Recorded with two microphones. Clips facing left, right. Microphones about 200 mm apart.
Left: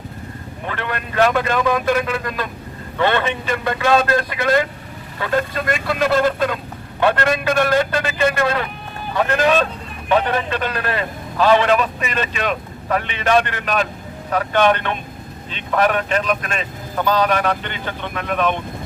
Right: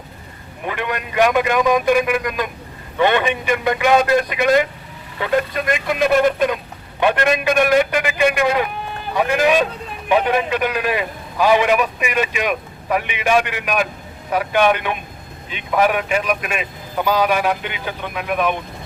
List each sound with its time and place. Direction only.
0.6 s a man's voice: 15° right (ahead or behind)